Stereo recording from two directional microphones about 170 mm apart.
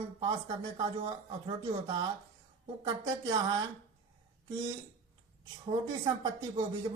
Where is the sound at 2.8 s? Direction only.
25° right (ahead or behind).